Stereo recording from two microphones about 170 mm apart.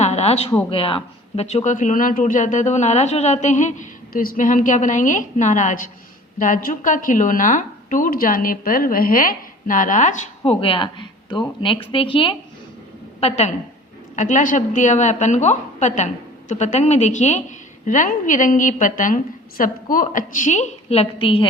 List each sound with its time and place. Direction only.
0.0 s speech: 40° left (ahead or behind)
10.4 s a woman's voice: 35° left (ahead or behind)